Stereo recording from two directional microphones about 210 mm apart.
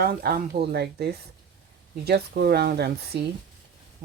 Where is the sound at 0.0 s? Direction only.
45° right (ahead or behind).